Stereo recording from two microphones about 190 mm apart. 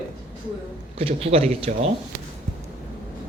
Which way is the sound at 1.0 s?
30° right (ahead or behind).